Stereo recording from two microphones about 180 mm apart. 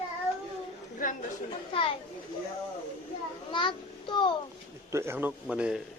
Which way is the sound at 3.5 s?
25° left (ahead or behind).